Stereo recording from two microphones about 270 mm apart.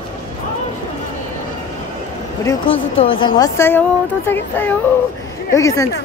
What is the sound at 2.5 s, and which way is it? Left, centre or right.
A woman's voice, centre.